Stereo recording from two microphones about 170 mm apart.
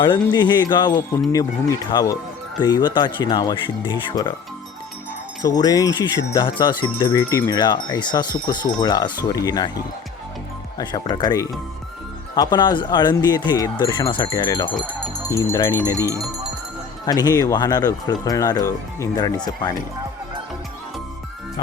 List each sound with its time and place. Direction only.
0.0 s speech: 25° left (ahead or behind)
5.4 s speech: 25° left (ahead or behind)
10.8 s speech: 25° left (ahead or behind)
16.0 s speech: 15° right (ahead or behind)
17.1 s speech: 25° left (ahead or behind)